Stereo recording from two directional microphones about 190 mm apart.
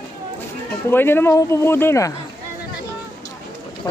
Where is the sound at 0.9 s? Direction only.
10° left (ahead or behind).